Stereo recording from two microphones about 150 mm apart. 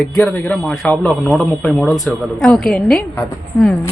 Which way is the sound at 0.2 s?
5° left (ahead or behind).